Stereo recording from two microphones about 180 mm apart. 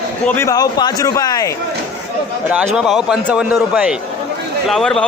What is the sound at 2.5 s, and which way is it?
A man's voice, 5° right (ahead or behind).